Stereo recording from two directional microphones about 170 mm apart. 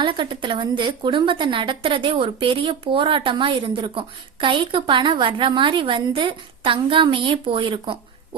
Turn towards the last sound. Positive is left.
turn(degrees=-30)  # may be behind; listen again after turning